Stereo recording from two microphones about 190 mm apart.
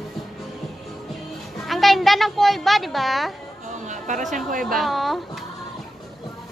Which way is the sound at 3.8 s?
40° right (ahead or behind).